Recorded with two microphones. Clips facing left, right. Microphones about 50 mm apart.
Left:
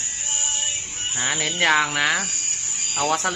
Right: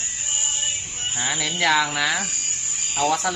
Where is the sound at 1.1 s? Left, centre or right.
Left.